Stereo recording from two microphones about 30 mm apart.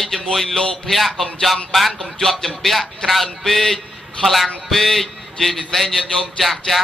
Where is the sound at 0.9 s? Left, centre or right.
Centre.